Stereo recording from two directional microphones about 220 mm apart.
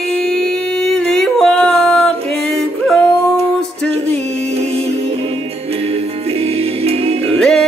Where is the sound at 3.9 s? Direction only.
30° right (ahead or behind).